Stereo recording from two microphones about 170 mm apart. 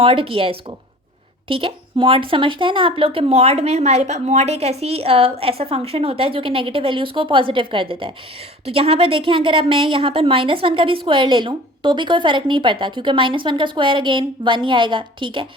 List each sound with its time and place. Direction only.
0.0 s a woman's voice: 30° right (ahead or behind)